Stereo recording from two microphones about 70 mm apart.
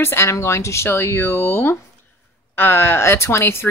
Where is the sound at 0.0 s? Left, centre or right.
Left.